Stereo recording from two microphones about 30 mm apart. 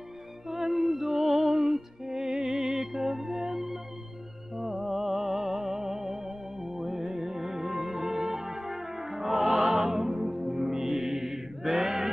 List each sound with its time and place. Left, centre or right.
0.5 s music: centre